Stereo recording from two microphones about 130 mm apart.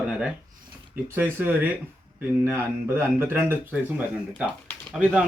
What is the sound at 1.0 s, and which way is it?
Speech, 20° right (ahead or behind).